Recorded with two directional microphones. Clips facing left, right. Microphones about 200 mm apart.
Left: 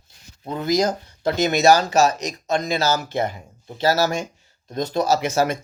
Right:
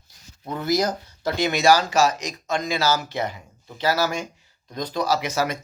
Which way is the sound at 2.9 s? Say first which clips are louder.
Left 3 dB; 50° left (ahead or behind).